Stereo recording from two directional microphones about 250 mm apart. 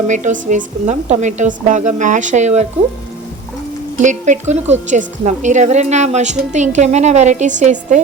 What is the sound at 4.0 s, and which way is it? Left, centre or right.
A woman's voice, right.